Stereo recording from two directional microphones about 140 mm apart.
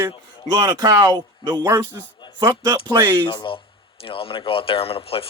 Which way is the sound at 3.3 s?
35° left (ahead or behind).